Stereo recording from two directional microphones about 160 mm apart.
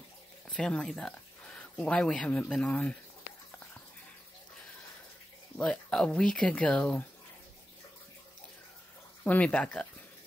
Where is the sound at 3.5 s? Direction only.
10° left (ahead or behind).